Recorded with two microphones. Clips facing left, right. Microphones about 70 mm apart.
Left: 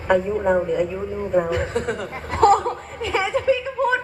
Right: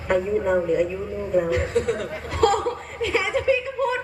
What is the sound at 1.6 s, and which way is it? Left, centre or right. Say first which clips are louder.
Chuckle: right 2 dB; left.